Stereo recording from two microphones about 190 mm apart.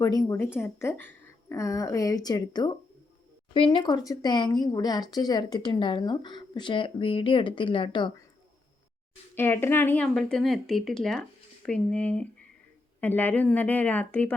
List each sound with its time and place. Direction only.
0.0 s speech: 20° left (ahead or behind)
9.3 s a woman's voice: 10° left (ahead or behind)